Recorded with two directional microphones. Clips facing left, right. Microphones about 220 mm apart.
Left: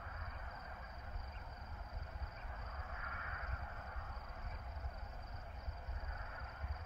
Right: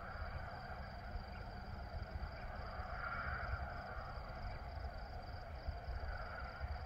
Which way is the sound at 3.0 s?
50° right (ahead or behind).